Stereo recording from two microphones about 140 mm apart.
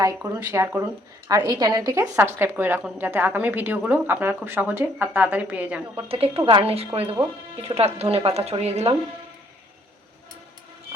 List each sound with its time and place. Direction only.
0.0 s a woman's voice: 15° right (ahead or behind)
6.1 s a woman's voice: 45° right (ahead or behind)